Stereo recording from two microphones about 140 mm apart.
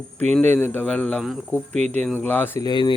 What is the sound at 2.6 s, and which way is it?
Speech, 30° left (ahead or behind).